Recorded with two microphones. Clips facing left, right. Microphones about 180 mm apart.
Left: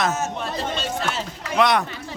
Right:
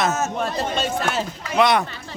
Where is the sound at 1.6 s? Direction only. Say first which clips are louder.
Right 1 dB; centre (ahead or behind).